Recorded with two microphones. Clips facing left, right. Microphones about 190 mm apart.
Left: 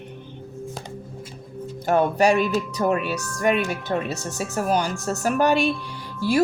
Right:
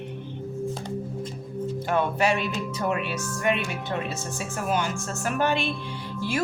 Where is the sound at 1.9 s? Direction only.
40° left (ahead or behind).